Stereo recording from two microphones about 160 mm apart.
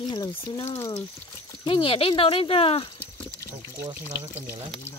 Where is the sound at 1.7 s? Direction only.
35° left (ahead or behind).